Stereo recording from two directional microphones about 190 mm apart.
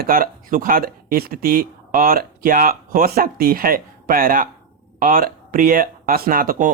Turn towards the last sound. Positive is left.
turn(degrees=-45)  # may be behind; listen again after turning